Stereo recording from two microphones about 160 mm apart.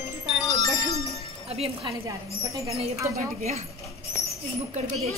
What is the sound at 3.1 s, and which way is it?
Speech, 45° right (ahead or behind).